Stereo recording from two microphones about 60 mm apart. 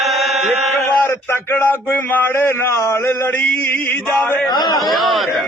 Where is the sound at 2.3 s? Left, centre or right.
Left.